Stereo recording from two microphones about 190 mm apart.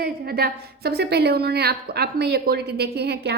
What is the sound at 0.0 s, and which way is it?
A woman's voice, 55° right (ahead or behind).